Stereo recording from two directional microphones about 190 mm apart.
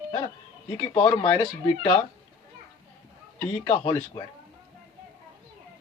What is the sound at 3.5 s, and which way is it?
Speech, 30° left (ahead or behind).